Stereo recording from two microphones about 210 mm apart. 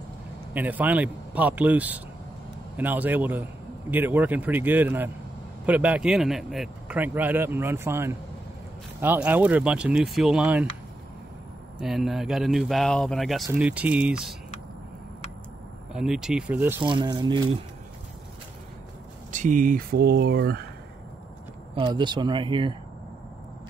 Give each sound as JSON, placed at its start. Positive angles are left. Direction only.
{"t": 0.5, "sound": "speech", "side_deg": -10}
{"t": 11.8, "sound": "speech", "side_deg": 0}
{"t": 15.9, "sound": "speech", "side_deg": -5}
{"t": 16.8, "sound": "speech", "side_deg": -20}
{"t": 19.3, "sound": "speech", "side_deg": -40}
{"t": 21.7, "sound": "speech", "side_deg": -20}